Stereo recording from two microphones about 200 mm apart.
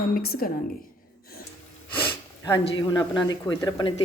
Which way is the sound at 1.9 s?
10° left (ahead or behind).